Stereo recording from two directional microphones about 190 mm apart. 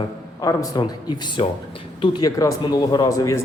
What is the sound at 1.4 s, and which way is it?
A man's voice, 30° left (ahead or behind).